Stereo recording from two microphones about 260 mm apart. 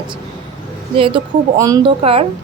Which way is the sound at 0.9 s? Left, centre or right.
Centre.